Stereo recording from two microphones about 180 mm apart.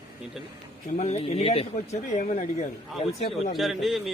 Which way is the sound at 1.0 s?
35° left (ahead or behind).